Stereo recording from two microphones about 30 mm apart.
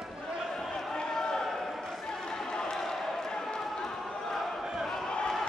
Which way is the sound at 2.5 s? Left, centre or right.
Left.